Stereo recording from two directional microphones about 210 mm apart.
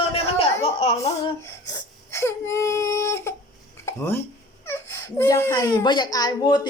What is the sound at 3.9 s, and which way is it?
A child's voice, 10° left (ahead or behind).